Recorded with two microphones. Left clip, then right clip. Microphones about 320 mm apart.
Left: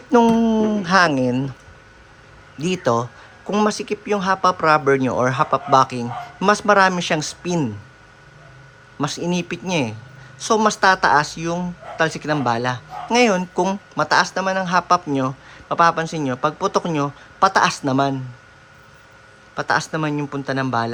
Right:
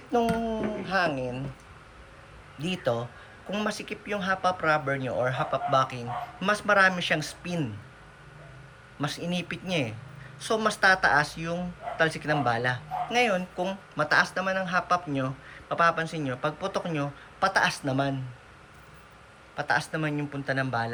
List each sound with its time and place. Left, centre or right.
0.1 s a sound: left
2.6 s speech: centre
9.0 s speech: centre
19.5 s speech: centre